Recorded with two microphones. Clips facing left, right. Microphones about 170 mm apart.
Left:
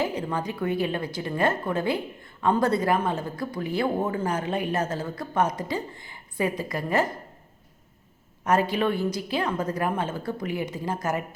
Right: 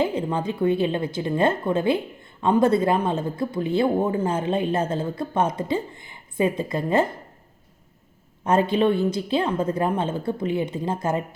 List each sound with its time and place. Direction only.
0.0 s a woman's voice: 25° right (ahead or behind)
8.4 s a woman's voice: 25° right (ahead or behind)